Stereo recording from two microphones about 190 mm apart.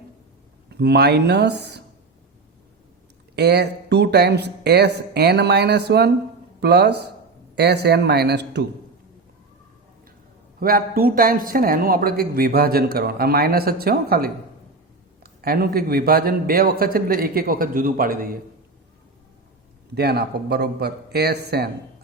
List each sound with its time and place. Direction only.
0.7 s speech: 60° right (ahead or behind)
3.3 s speech: 60° right (ahead or behind)
10.6 s a man's voice: 50° right (ahead or behind)
20.0 s speech: 60° right (ahead or behind)